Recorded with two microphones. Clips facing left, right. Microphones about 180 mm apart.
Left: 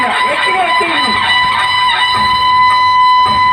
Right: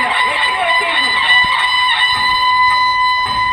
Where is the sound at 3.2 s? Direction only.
90° left.